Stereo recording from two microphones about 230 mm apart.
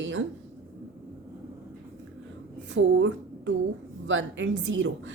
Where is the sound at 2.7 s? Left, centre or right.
Right.